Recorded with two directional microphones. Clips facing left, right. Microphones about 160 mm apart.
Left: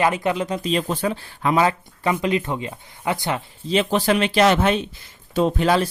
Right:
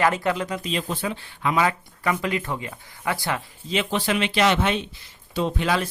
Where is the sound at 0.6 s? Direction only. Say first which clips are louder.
Left 5 dB; 40° left (ahead or behind); by 3.4 s 20° left (ahead or behind).